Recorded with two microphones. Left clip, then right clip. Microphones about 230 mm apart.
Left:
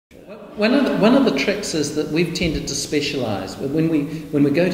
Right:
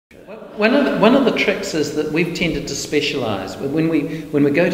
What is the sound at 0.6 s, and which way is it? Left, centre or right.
A man's voice, centre.